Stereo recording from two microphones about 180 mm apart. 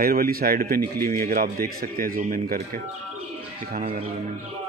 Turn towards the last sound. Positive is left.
turn(degrees=-45)  # may be behind; listen again after turning